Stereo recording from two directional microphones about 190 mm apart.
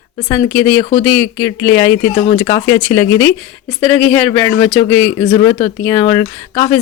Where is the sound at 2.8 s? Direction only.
10° left (ahead or behind).